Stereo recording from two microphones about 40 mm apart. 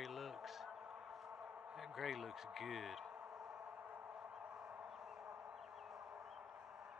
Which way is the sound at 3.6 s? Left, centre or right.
Right.